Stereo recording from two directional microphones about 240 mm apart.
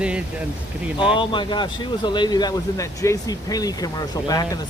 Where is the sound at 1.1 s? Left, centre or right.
Left.